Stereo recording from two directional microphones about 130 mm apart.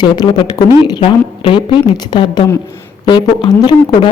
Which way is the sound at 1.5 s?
40° left (ahead or behind).